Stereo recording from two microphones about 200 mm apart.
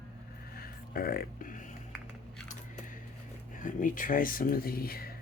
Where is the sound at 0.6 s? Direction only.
50° left (ahead or behind).